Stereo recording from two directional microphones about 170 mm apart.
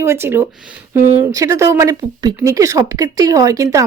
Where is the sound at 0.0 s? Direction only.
15° right (ahead or behind).